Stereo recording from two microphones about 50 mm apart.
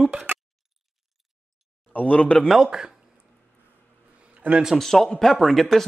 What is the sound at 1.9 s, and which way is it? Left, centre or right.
Speech, left.